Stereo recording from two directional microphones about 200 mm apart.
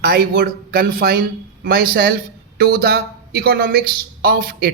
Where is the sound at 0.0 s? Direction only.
50° right (ahead or behind).